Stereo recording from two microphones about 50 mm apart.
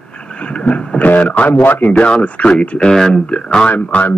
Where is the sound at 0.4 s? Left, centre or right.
Left.